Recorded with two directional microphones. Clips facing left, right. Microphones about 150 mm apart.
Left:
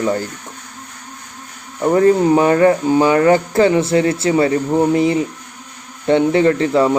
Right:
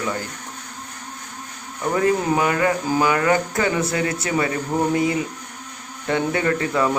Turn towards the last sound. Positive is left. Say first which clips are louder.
# left 7 dB
turn(degrees=30)  # may be behind; listen again after turning